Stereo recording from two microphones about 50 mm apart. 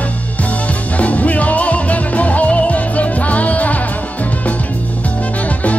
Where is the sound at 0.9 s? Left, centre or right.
Left.